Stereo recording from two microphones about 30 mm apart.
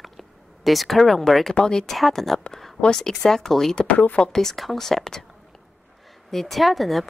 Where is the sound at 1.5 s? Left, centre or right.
Left.